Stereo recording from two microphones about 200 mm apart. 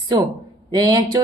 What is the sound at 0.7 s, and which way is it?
Speech, 20° right (ahead or behind).